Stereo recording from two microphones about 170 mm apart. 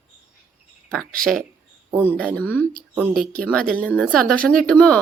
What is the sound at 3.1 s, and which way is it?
Speech, 60° right (ahead or behind).